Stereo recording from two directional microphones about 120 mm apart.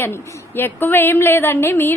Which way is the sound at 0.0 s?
15° left (ahead or behind).